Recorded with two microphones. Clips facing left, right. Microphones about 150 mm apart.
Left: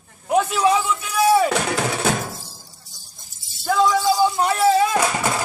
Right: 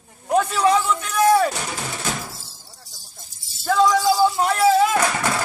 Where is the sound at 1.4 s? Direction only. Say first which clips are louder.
Left 5 dB; 75° left (ahead or behind).